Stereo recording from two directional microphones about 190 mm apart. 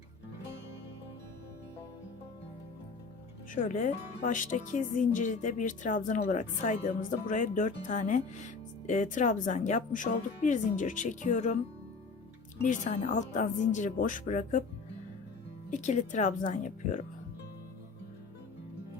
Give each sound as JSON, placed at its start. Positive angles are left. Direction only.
{"t": 3.5, "sound": "speech", "side_deg": 45}
{"t": 12.6, "sound": "speech", "side_deg": 35}
{"t": 15.7, "sound": "speech", "side_deg": 40}